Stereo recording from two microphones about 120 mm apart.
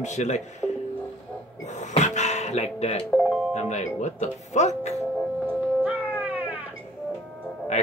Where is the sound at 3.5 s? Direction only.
70° left (ahead or behind).